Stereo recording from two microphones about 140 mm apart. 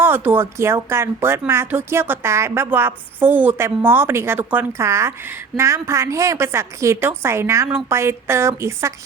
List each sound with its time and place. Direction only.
0.0 s a woman's voice: 15° right (ahead or behind)